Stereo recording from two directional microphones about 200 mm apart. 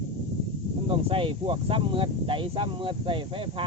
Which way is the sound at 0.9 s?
25° right (ahead or behind).